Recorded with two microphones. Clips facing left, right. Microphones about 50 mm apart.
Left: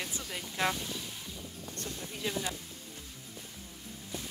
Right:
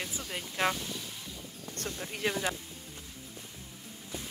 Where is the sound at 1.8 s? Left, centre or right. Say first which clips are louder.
Right 3 dB; right.